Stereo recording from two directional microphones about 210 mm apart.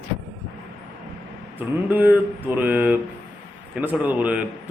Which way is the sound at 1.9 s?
10° right (ahead or behind).